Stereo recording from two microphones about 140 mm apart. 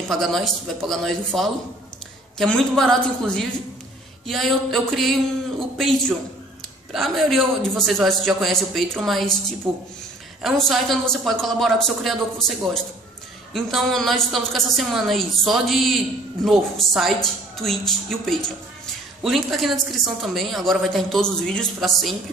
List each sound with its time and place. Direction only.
0.1 s a woman's voice: centre (ahead or behind)
9.7 s speech: 10° right (ahead or behind)
10.4 s a woman's voice: centre (ahead or behind)